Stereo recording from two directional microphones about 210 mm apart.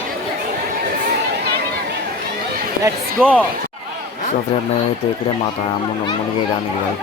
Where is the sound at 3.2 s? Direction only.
5° left (ahead or behind).